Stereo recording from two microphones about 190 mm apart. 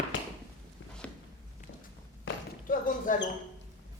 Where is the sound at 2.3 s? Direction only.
85° left.